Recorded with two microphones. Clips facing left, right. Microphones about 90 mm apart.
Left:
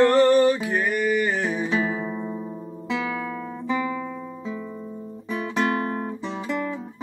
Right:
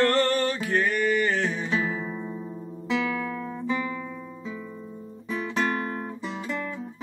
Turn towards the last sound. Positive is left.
turn(degrees=5)  # may be behind; listen again after turning